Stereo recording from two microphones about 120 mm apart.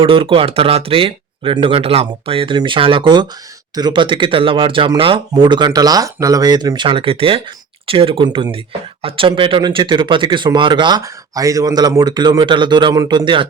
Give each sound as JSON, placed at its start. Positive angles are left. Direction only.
{"t": 0.0, "sound": "speech", "side_deg": -45}
{"t": 5.3, "sound": "speech", "side_deg": -35}